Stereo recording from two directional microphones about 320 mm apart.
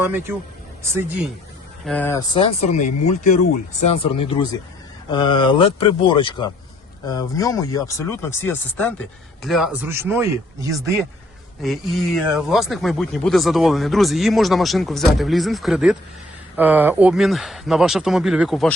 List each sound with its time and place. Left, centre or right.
0.0 s speech: centre
1.8 s speech: centre
11.6 s speech: centre